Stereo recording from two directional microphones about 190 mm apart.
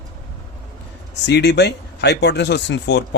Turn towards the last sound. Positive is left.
turn(degrees=65)  # may be behind; listen again after turning